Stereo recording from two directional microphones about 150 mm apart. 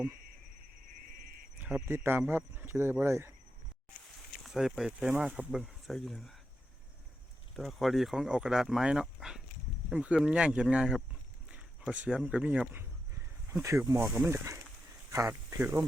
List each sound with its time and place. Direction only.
1.6 s speech: 15° right (ahead or behind)
4.4 s speech: centre (ahead or behind)
7.5 s speech: centre (ahead or behind); by 15.8 s 15° right (ahead or behind)